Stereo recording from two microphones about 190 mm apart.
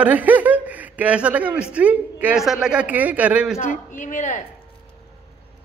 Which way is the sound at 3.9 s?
40° left (ahead or behind).